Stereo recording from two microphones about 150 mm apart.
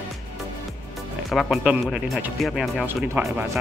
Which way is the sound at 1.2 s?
Centre (ahead or behind).